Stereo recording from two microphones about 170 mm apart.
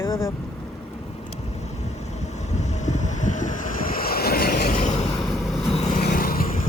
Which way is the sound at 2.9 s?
45° left (ahead or behind).